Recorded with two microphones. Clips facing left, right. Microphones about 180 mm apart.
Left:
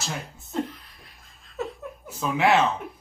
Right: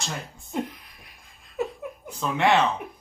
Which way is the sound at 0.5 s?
15° right (ahead or behind).